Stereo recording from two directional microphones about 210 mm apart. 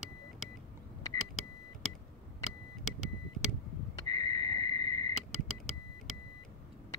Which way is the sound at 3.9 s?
20° left (ahead or behind).